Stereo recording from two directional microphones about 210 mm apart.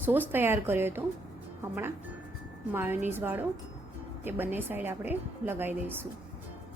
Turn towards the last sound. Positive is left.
turn(degrees=-10)  # may be behind; listen again after turning